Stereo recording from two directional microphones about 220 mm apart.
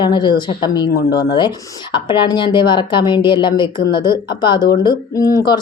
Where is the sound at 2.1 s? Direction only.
20° left (ahead or behind).